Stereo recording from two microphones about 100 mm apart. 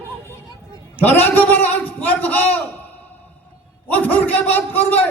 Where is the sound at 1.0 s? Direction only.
20° left (ahead or behind).